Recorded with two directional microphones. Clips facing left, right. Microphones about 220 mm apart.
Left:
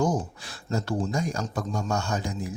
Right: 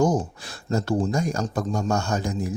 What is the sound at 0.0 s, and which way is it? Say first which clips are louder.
Speech: right 4 dB; 45° right (ahead or behind).